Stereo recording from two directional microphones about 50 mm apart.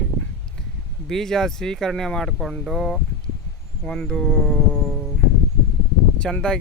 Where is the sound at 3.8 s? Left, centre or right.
Centre.